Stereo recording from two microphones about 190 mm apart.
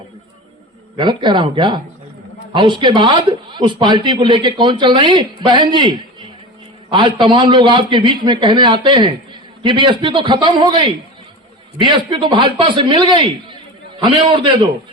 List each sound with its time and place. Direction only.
0.9 s a man's voice: 25° right (ahead or behind)